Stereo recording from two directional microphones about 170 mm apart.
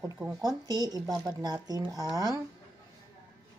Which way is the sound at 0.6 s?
20° right (ahead or behind).